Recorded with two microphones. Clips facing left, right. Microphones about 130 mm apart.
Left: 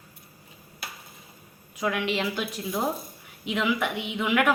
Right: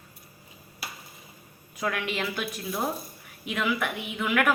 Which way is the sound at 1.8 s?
15° left (ahead or behind).